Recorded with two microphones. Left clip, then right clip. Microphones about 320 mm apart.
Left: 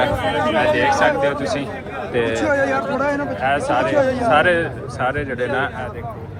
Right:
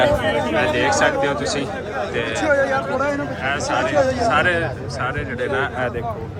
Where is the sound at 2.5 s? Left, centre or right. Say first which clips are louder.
Even; left.